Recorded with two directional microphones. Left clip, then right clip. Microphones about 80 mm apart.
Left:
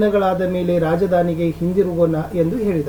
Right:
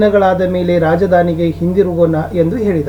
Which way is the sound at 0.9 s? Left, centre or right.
Centre.